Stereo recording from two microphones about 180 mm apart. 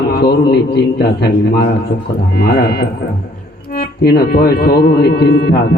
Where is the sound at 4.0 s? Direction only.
60° left (ahead or behind).